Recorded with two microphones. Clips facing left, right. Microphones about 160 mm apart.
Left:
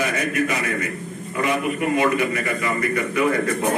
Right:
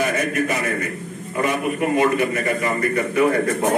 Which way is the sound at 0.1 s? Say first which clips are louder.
Right 1 dB; 45° right (ahead or behind).